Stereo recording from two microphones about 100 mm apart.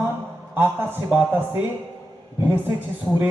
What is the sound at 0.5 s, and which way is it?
Music, 20° right (ahead or behind).